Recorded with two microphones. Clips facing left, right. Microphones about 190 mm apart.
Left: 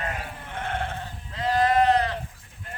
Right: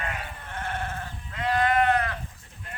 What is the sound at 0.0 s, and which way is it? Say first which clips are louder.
Sheep: left 2 dB; 25° left (ahead or behind).